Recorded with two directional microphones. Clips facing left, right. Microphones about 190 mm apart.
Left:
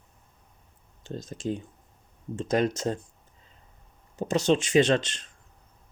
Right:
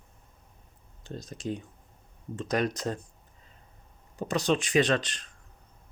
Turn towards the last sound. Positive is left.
turn(degrees=25)  # may be behind; listen again after turning